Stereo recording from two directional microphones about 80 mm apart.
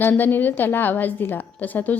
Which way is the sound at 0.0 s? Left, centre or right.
Left.